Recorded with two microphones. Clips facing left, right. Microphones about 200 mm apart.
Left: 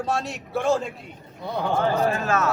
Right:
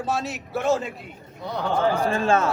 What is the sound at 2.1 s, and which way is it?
Speech, 30° right (ahead or behind).